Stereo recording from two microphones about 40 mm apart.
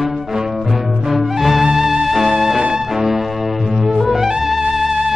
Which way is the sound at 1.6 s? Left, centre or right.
Centre.